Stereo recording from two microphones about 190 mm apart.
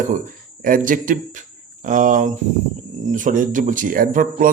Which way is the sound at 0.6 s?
45° right (ahead or behind).